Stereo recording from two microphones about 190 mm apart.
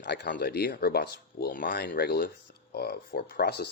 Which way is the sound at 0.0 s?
65° left (ahead or behind).